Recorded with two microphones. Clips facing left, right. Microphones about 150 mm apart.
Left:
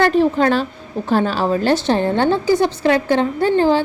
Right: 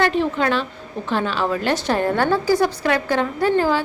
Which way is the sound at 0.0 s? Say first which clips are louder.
Left 5 dB; 40° left (ahead or behind).